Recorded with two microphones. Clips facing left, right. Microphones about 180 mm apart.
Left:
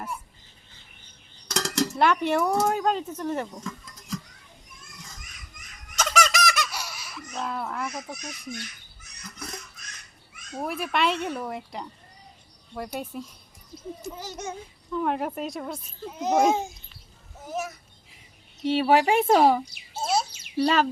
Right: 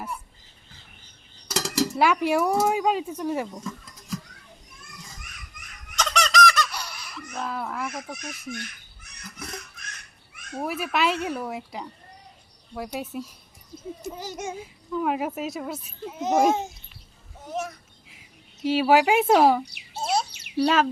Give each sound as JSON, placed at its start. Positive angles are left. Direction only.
{"t": 1.5, "sound": "speech", "side_deg": -5}
{"t": 6.0, "sound": "fowl", "side_deg": 5}
{"t": 7.3, "sound": "a child's voice", "side_deg": 0}
{"t": 8.4, "sound": "bird", "side_deg": -55}
{"t": 10.6, "sound": "a child's voice", "side_deg": -5}
{"t": 17.4, "sound": "a sound", "side_deg": 5}
{"t": 18.6, "sound": "a child's voice", "side_deg": 0}
{"t": 20.0, "sound": "a sound", "side_deg": 0}
{"t": 20.6, "sound": "a child's voice", "side_deg": 0}